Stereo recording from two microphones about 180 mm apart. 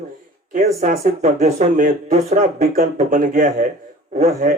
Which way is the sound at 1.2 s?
40° right (ahead or behind).